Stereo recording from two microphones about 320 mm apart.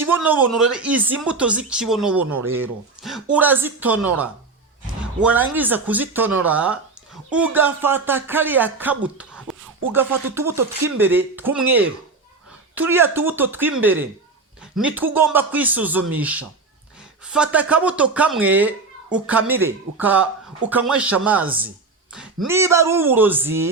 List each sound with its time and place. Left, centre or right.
0.1 s speech: centre
12.7 s a man's voice: centre